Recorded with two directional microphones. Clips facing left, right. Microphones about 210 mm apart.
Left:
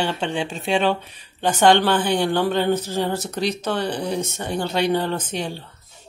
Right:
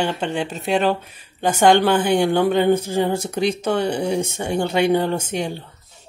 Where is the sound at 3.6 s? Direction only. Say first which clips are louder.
Right 4 dB; 10° right (ahead or behind).